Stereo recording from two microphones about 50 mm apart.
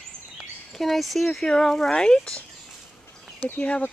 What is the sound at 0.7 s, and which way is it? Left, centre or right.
Speech, centre.